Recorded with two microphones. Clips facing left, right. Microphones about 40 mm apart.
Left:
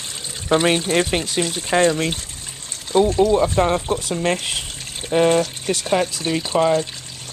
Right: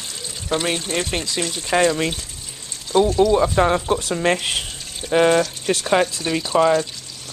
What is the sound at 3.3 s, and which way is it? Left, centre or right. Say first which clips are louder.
Speech: even; centre.